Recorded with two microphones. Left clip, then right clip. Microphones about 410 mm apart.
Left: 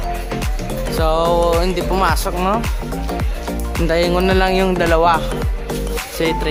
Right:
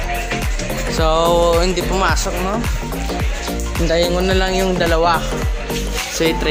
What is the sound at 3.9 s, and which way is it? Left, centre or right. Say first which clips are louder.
Music: left 1 dB; left.